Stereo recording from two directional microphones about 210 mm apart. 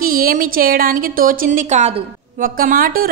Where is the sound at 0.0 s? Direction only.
40° right (ahead or behind).